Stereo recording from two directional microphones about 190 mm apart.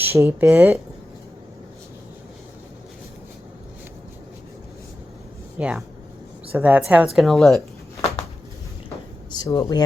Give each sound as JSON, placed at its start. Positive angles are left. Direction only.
{"t": 0.1, "sound": "speech", "side_deg": -10}
{"t": 5.5, "sound": "a woman's voice", "side_deg": -5}
{"t": 9.3, "sound": "speech", "side_deg": 20}